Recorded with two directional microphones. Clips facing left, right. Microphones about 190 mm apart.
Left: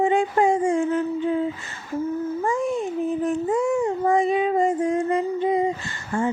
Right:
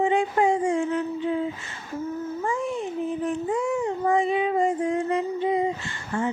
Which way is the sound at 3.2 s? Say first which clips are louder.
Left 4 dB; 45° left (ahead or behind).